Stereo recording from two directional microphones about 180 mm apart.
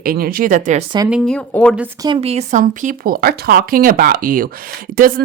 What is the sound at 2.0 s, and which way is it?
Speech, 30° right (ahead or behind).